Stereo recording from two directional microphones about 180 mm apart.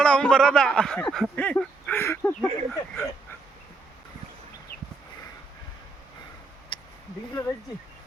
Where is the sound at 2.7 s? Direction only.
Centre (ahead or behind).